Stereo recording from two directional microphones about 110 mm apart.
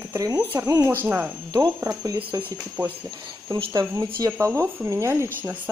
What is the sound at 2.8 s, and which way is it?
Speech, 20° right (ahead or behind).